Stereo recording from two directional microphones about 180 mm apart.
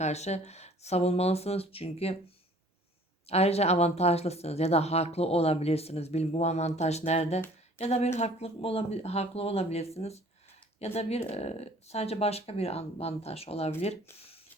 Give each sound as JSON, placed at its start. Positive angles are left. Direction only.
{"t": 0.0, "sound": "speech", "side_deg": 40}
{"t": 3.2, "sound": "speech", "side_deg": 35}